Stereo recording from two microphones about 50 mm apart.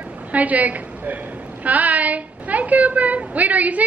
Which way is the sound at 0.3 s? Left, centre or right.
Right.